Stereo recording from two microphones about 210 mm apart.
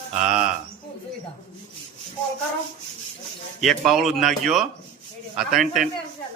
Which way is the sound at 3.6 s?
Centre (ahead or behind).